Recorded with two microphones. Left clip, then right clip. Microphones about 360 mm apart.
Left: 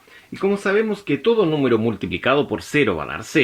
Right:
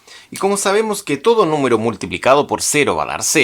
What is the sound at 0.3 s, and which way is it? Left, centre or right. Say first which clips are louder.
Speech: right 4 dB; centre.